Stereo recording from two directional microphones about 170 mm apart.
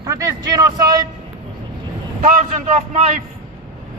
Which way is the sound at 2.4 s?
45° right (ahead or behind).